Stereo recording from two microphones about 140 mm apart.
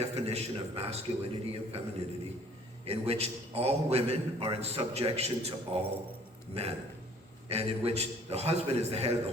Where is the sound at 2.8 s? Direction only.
45° right (ahead or behind).